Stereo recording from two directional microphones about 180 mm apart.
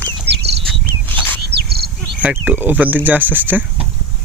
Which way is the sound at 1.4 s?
65° right (ahead or behind).